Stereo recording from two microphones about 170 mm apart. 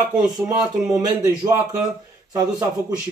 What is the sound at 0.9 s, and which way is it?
Speech, 20° right (ahead or behind).